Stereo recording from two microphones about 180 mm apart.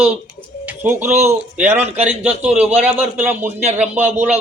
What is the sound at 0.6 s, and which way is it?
Bird, 10° right (ahead or behind).